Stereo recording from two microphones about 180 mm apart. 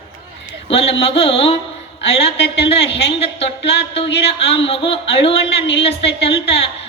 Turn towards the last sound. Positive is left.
turn(degrees=35)  # may be behind; listen again after turning